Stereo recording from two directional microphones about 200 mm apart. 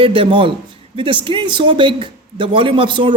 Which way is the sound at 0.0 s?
25° right (ahead or behind).